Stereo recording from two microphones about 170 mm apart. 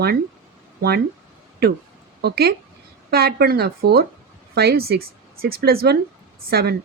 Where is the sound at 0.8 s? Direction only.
70° right (ahead or behind).